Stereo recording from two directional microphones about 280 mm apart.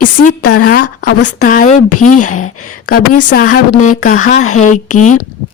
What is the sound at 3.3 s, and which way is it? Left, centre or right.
Speech, left.